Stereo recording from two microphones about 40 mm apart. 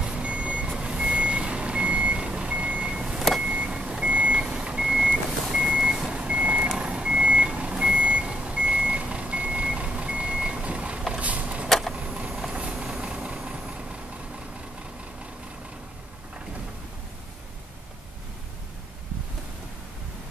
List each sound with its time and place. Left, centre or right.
0.0 s reversing beeps: right
3.4 s vehicle: right
4.1 s reversing beeps: right
11.1 s vehicle: right